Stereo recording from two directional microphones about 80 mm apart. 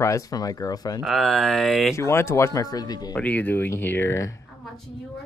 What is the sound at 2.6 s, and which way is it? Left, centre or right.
Speech, left.